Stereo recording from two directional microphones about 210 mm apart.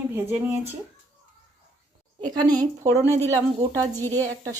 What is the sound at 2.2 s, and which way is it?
Speech, 20° right (ahead or behind).